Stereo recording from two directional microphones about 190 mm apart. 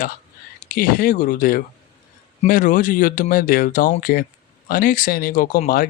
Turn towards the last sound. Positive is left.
turn(degrees=50)  # may be behind; listen again after turning